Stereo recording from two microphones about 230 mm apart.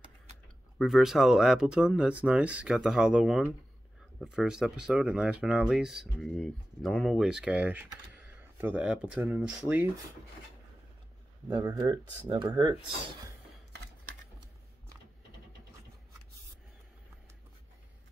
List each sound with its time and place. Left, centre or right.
0.7 s speech: centre
11.5 s speech: centre